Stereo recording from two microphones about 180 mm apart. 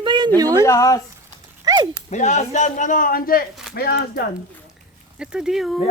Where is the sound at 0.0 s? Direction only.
25° right (ahead or behind).